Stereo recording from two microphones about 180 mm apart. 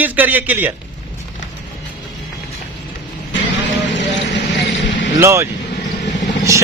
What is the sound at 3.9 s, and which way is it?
Vehicle, 75° left (ahead or behind).